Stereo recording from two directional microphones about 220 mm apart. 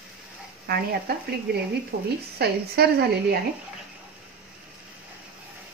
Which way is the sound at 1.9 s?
45° right (ahead or behind).